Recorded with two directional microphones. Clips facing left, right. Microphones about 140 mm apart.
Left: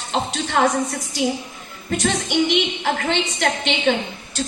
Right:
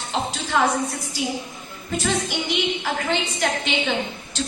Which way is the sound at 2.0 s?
80° left.